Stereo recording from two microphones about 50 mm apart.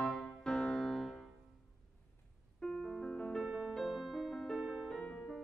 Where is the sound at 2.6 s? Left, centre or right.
Centre.